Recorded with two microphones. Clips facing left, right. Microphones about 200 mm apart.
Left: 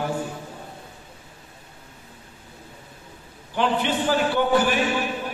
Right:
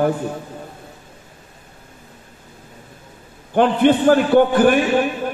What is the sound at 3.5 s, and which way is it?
A man's voice, 55° right (ahead or behind).